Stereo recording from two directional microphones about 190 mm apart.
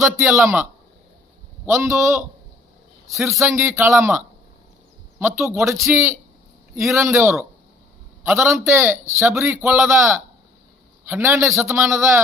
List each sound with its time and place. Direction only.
0.0 s speech: 15° right (ahead or behind)
5.2 s speech: 15° right (ahead or behind)